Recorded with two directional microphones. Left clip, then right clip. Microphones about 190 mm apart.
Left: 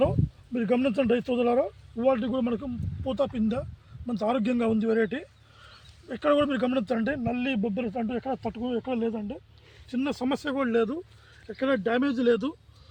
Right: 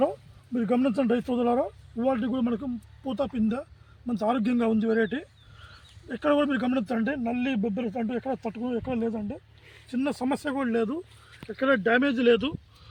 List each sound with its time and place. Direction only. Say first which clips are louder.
0.0 s a man's voice: left 1 dB; 5° left (ahead or behind)
6.2 s a man's voice: left 1 dB; 5° left (ahead or behind); by 8.8 s 15° right (ahead or behind)
8.8 s speech: even; 30° right (ahead or behind)
9.9 s speech: right 1 dB; 55° right (ahead or behind); by 12.5 s 35° right (ahead or behind)